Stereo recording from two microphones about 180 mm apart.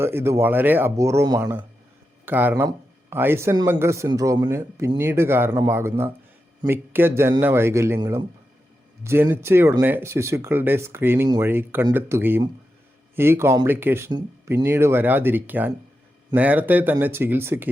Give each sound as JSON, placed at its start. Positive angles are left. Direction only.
{"t": 0.0, "sound": "speech", "side_deg": -15}